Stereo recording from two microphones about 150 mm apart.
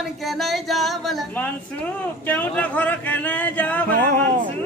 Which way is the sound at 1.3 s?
10° left (ahead or behind).